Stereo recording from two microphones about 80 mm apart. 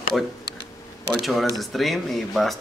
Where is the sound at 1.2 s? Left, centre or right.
Centre.